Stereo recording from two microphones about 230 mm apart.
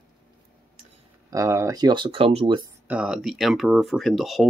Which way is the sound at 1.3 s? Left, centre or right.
Centre.